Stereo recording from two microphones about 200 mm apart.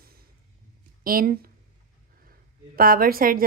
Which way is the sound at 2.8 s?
45° right (ahead or behind).